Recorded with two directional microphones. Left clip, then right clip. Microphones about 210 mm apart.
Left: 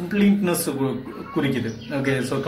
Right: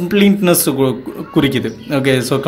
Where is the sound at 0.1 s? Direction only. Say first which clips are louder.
Right 9 dB; 45° right (ahead or behind).